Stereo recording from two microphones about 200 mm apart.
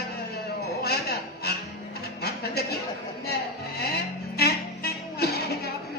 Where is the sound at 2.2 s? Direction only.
55° left (ahead or behind).